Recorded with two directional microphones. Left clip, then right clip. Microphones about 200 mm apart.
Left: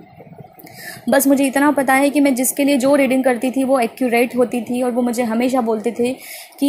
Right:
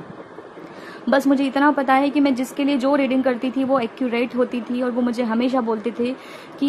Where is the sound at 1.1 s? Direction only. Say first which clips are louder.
Left 4 dB; 15° left (ahead or behind).